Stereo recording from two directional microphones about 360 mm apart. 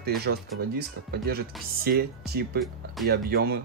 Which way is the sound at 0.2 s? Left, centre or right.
Right.